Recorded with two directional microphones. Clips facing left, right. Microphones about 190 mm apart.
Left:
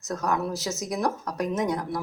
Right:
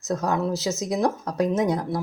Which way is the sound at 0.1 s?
25° right (ahead or behind).